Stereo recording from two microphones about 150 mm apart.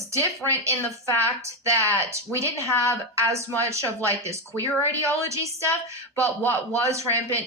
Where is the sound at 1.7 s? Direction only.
20° right (ahead or behind).